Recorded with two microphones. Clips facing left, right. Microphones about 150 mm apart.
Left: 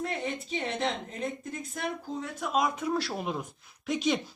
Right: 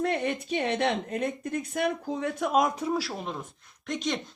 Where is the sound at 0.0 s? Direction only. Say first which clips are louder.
Right 5 dB; 65° right (ahead or behind); by 2.8 s 45° right (ahead or behind).